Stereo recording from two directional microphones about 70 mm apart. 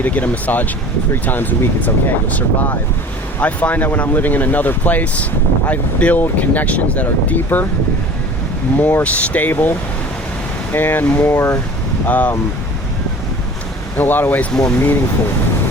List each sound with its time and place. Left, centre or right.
0.0 s speech: left
8.8 s speech: left
11.3 s speech: left
12.0 s speech: left
13.9 s speech: left